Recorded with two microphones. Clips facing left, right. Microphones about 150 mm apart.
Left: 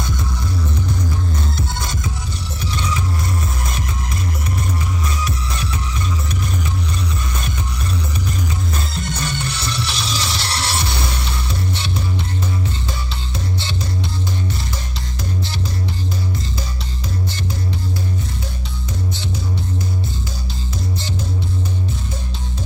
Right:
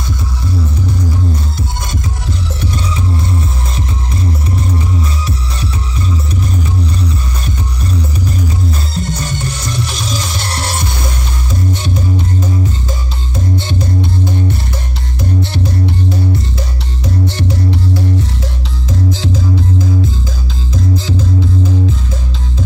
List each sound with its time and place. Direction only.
8.9 s music: 40° right (ahead or behind)